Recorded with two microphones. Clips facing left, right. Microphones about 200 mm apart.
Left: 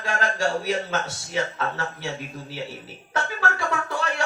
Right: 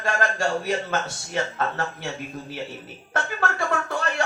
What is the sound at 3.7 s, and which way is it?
Music, 50° right (ahead or behind).